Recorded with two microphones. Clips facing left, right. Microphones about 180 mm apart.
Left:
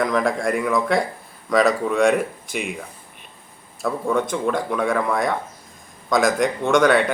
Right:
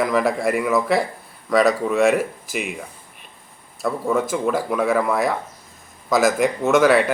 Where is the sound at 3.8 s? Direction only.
Centre (ahead or behind).